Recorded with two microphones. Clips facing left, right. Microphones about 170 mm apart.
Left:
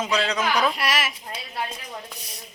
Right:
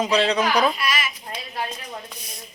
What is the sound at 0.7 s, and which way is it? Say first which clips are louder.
Speech: left 1 dB; 75° left (ahead or behind).